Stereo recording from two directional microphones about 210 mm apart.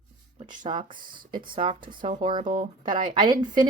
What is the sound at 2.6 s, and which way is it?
Speech, 20° right (ahead or behind).